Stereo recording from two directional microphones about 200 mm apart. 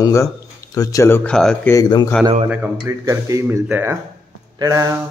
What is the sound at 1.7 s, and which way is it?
Speech, 20° left (ahead or behind).